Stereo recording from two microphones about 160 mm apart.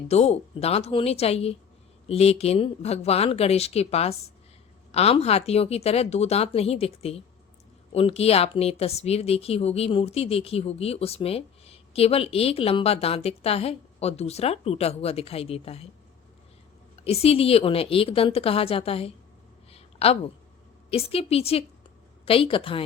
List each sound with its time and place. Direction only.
0.1 s speech: 40° left (ahead or behind)
17.0 s speech: 40° left (ahead or behind)
19.7 s a sound: 40° left (ahead or behind)
20.9 s speech: 35° left (ahead or behind)